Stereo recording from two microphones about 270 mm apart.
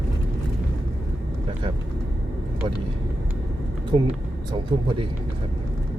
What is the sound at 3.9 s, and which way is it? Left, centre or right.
Speech, centre.